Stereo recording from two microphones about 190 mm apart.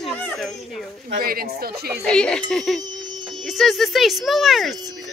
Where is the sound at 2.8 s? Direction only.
20° right (ahead or behind).